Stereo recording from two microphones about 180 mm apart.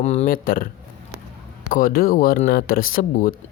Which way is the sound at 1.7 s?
55° left (ahead or behind).